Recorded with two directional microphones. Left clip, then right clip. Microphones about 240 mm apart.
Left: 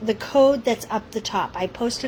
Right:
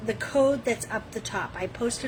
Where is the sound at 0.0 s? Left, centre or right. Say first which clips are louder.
Left 6 dB; left.